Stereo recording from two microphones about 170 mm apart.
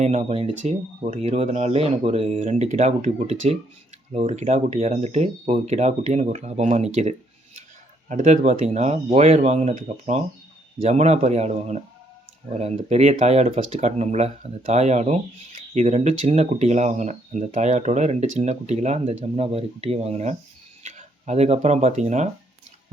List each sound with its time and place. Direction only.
0.0 s speech: 40° right (ahead or behind)
8.1 s speech: 45° right (ahead or behind)